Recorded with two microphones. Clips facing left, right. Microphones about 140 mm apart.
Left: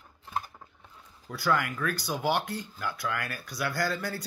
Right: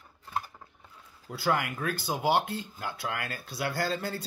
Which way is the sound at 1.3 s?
20° right (ahead or behind).